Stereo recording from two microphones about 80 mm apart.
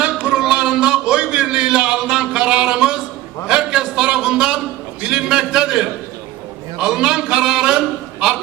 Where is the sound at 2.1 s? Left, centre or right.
Centre.